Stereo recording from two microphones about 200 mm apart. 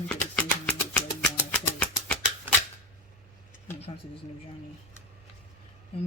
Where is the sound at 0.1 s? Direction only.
5° left (ahead or behind).